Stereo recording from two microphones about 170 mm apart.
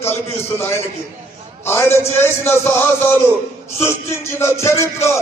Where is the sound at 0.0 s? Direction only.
15° left (ahead or behind).